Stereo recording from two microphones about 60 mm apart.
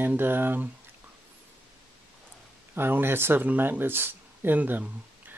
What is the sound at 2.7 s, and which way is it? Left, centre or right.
Speech, right.